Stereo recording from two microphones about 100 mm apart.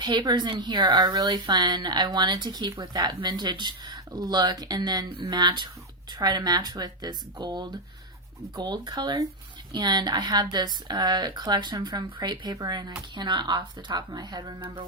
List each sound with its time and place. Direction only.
0.0 s speech: 45° right (ahead or behind)